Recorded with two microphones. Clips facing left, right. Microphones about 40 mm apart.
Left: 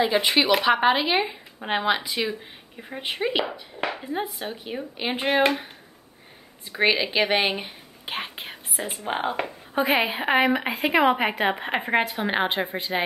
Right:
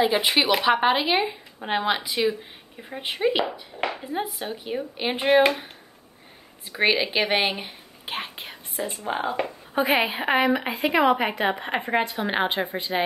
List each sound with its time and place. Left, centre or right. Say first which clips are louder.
0.0 s speech: even; centre
6.8 s speech: even; centre
8.7 s speech: right 2 dB; left
9.0 s speech: even; left
9.8 s a woman's voice: even; centre